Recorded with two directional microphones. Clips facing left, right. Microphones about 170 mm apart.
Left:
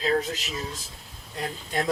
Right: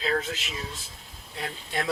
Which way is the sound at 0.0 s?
40° left (ahead or behind).